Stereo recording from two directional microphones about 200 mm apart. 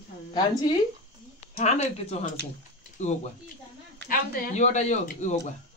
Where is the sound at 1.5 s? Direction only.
35° left (ahead or behind).